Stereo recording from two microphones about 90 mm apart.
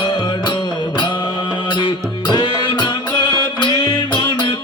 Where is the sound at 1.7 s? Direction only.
60° left (ahead or behind).